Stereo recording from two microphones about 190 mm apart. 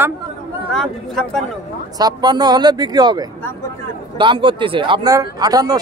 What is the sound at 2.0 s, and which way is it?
Speech, 20° right (ahead or behind).